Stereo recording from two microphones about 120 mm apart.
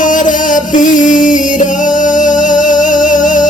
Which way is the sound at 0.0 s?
90° left.